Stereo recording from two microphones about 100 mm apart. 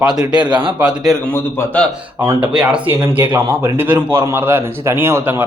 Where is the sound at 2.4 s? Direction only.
10° right (ahead or behind).